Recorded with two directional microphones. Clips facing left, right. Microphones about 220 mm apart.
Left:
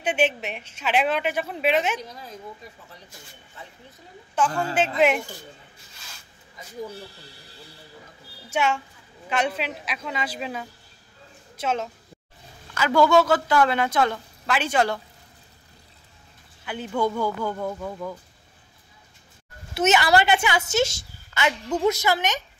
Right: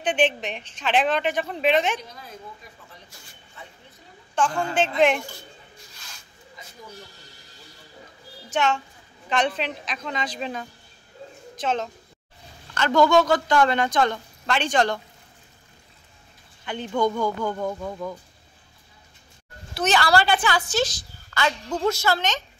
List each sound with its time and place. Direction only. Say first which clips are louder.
0.0 s a woman's voice: right 1 dB; 10° left (ahead or behind)
4.4 s a woman's voice: even; 5° left (ahead or behind)
8.5 s a child's voice: right 1 dB; 10° left (ahead or behind)
16.6 s a man's voice: right 1 dB; 5° left (ahead or behind)
19.7 s a woman's voice: left 2 dB; 20° left (ahead or behind)